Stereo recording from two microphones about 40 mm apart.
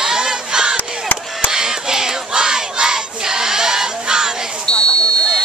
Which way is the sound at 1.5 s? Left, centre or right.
Centre.